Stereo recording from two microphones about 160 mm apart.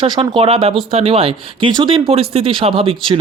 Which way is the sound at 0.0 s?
30° right (ahead or behind).